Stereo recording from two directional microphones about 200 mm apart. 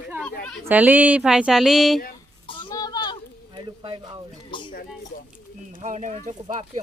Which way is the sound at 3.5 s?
25° right (ahead or behind).